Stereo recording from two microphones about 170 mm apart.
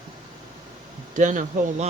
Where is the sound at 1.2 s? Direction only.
50° right (ahead or behind).